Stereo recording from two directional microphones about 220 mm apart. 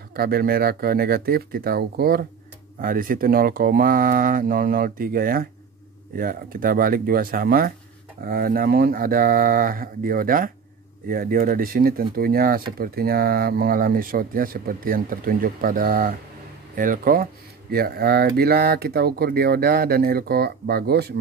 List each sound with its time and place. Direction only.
0.1 s speech: 45° right (ahead or behind)